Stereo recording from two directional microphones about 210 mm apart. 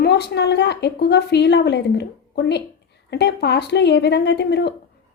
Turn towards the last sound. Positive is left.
turn(degrees=50)  # may be behind; listen again after turning